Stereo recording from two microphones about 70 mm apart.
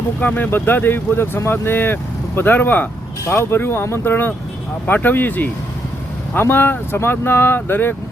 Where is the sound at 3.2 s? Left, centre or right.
Left.